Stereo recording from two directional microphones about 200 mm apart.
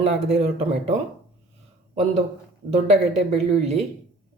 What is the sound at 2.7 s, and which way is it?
Speech, 30° right (ahead or behind).